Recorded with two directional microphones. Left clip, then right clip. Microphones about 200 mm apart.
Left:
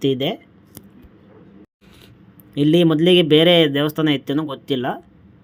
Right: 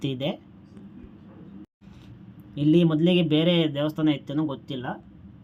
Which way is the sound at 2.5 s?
40° left (ahead or behind).